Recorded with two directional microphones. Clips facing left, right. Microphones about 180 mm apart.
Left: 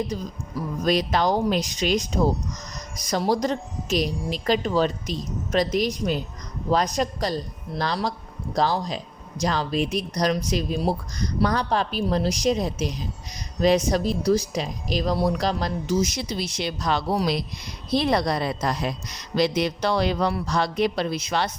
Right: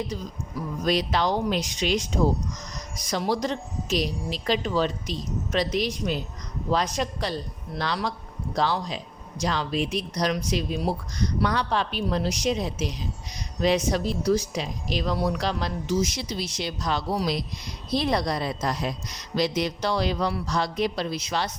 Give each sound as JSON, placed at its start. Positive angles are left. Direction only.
{"t": 0.1, "sound": "speech", "side_deg": 45}
{"t": 3.1, "sound": "speech", "side_deg": 40}